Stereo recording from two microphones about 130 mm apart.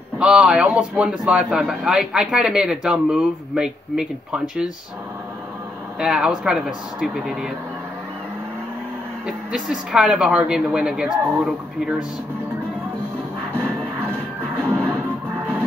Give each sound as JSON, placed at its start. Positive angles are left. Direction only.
{"t": 0.2, "sound": "a man's voice", "side_deg": -5}
{"t": 5.9, "sound": "a man's voice", "side_deg": -5}
{"t": 9.2, "sound": "a man's voice", "side_deg": -5}
{"t": 14.6, "sound": "music", "side_deg": 10}